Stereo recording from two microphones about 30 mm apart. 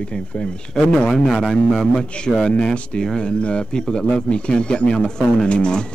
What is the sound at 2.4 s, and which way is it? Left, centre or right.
Speech, left.